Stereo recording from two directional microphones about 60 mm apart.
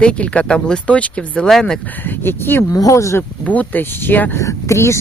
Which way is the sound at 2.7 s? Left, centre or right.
Left.